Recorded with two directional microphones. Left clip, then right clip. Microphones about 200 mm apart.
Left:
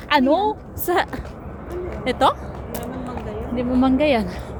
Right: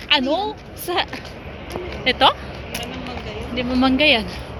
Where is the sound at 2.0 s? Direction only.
10° left (ahead or behind).